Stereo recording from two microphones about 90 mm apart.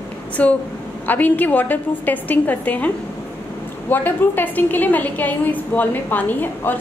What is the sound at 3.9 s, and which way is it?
A woman's voice, 20° left (ahead or behind).